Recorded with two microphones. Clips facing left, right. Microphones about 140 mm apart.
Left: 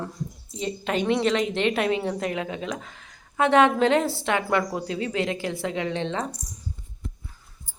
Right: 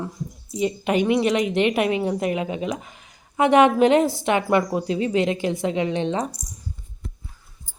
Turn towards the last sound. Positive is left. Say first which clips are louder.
# right 4 dB
turn(degrees=-15)  # may be behind; listen again after turning